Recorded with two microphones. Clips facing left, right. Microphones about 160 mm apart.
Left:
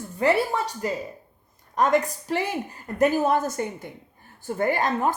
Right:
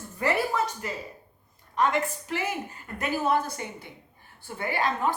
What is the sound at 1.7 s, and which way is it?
A woman's voice, 40° left (ahead or behind).